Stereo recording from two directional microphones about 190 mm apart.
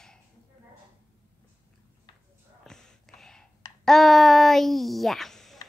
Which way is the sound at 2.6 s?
5° left (ahead or behind).